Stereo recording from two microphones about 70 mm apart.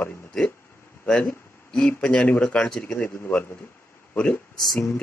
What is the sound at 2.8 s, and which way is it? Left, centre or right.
Speech, left.